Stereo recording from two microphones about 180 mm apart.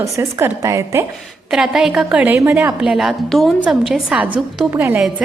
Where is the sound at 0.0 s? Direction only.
15° right (ahead or behind).